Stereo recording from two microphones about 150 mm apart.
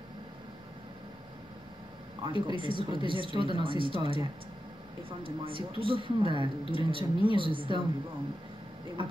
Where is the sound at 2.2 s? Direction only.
35° right (ahead or behind).